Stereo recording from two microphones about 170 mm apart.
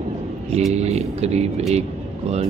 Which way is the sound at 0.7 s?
40° right (ahead or behind).